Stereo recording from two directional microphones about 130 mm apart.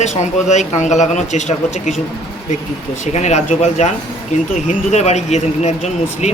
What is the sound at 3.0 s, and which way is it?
Speech, 65° left (ahead or behind).